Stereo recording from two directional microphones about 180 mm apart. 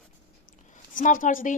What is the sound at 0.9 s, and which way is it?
Speech, 45° left (ahead or behind).